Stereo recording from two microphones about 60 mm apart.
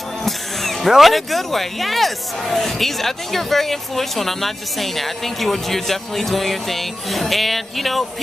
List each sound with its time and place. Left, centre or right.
0.2 s speech: centre